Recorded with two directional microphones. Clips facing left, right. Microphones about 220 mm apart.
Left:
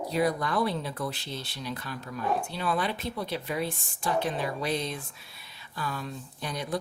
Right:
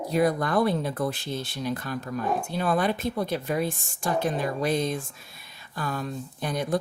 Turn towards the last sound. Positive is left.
turn(degrees=-50)  # may be behind; listen again after turning